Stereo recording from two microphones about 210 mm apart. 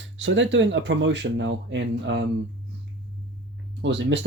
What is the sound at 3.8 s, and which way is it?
Speech, 55° right (ahead or behind).